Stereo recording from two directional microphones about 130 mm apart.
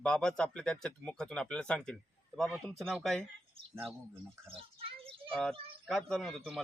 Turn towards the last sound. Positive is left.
turn(degrees=0)  # may be behind; listen again after turning